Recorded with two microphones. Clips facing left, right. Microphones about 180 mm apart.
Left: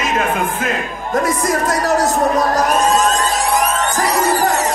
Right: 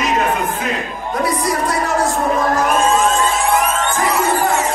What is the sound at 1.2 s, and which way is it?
Crowd, 45° left (ahead or behind).